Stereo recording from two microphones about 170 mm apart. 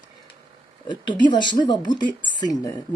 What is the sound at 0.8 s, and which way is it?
Speech, 25° left (ahead or behind).